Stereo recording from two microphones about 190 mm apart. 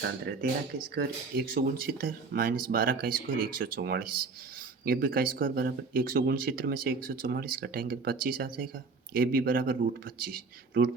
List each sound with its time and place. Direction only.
0.0 s speech: 55° right (ahead or behind)